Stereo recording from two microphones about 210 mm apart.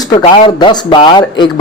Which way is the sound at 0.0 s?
20° left (ahead or behind).